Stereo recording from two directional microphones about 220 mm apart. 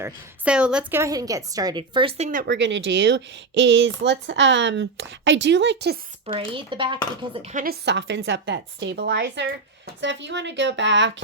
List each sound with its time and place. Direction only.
0.0 s a woman's voice: 5° right (ahead or behind); by 2.4 s 30° right (ahead or behind)
2.4 s speech: 50° right (ahead or behind)
6.2 s speech: 25° right (ahead or behind)
7.5 s a woman's voice: 40° right (ahead or behind)